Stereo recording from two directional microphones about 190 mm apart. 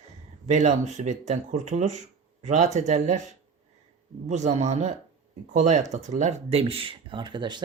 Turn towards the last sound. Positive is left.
turn(degrees=-25)  # may be behind; listen again after turning